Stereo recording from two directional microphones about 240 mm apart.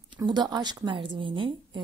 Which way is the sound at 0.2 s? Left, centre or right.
Centre.